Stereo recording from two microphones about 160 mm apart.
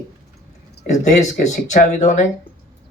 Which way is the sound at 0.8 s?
50° left (ahead or behind).